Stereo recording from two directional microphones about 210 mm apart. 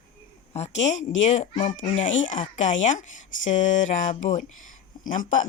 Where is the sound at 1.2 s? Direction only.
35° left (ahead or behind).